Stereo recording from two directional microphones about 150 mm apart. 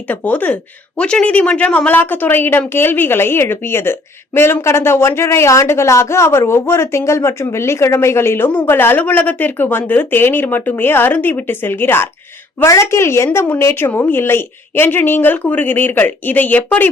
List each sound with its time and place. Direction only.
0.1 s a woman's voice: 10° left (ahead or behind)